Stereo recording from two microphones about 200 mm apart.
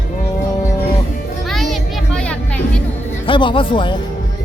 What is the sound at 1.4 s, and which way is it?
Music, centre (ahead or behind).